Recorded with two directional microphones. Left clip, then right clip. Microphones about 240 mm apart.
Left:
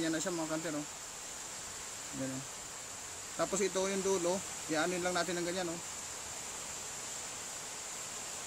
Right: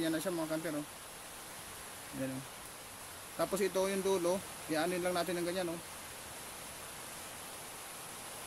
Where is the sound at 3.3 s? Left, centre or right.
Centre.